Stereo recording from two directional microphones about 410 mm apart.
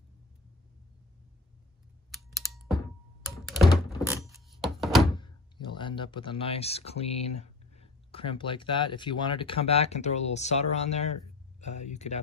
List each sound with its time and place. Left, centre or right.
2.0 s typing: centre
3.4 s thunk: centre
5.1 s speech: centre